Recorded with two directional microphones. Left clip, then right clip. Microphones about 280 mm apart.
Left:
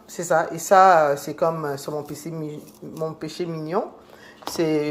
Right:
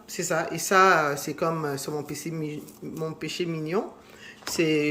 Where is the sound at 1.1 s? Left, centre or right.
Centre.